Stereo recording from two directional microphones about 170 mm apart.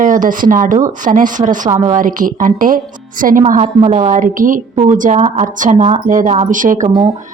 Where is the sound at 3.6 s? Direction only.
40° right (ahead or behind).